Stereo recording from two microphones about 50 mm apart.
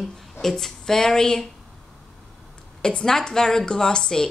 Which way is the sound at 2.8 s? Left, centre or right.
Centre.